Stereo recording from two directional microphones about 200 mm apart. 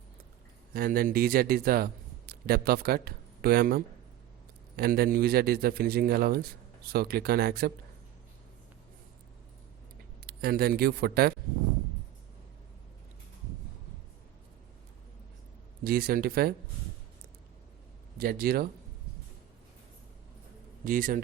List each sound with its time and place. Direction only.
0.7 s a man's voice: 45° right (ahead or behind)
10.2 s speech: 50° right (ahead or behind)
15.8 s a man's voice: 50° right (ahead or behind)
18.2 s a man's voice: 50° right (ahead or behind)
20.8 s a man's voice: 45° right (ahead or behind)